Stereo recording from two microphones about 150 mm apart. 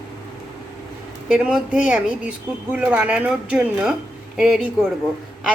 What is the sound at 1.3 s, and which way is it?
Speech, 5° right (ahead or behind).